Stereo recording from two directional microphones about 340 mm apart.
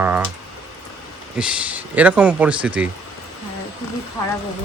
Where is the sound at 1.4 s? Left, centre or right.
Centre.